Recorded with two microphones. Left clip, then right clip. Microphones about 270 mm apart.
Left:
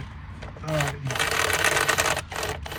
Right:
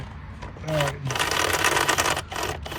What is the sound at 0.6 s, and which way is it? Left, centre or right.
Sewing machine, centre.